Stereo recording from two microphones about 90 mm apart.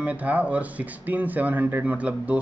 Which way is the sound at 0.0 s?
15° right (ahead or behind).